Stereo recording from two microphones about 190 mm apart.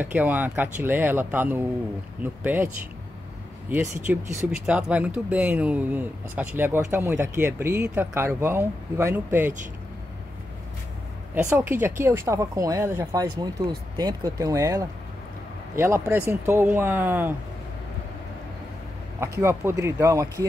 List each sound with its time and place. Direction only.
0.0 s speech: 10° right (ahead or behind)
4.1 s speech: 5° right (ahead or behind)
11.5 s speech: 10° right (ahead or behind)
19.1 s speech: 15° right (ahead or behind)